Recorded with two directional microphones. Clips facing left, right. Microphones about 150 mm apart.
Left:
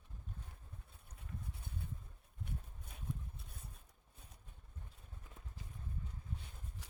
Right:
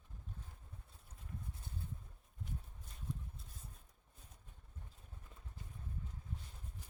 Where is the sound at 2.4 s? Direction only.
60° left (ahead or behind).